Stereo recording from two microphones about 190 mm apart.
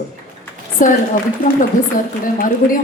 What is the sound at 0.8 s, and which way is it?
Speech, 45° left (ahead or behind).